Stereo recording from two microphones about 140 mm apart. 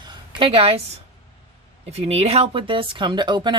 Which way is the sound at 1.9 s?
45° right (ahead or behind).